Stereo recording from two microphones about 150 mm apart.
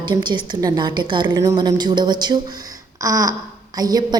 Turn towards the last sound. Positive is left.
turn(degrees=-25)  # may be behind; listen again after turning